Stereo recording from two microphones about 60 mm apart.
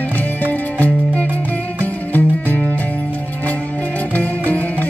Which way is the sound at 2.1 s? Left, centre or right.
Left.